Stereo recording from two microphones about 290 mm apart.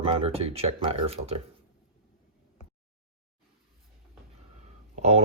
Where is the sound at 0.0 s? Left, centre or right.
Centre.